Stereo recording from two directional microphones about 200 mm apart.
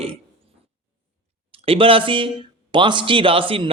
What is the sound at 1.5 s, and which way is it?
Speech, 30° right (ahead or behind).